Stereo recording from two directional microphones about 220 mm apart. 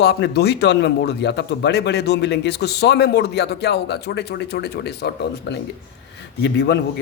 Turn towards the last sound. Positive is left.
turn(degrees=50)  # may be behind; listen again after turning